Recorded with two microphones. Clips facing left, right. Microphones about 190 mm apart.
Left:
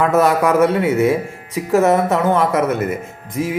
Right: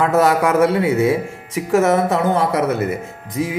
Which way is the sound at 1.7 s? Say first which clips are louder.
Left 1 dB; 35° left (ahead or behind).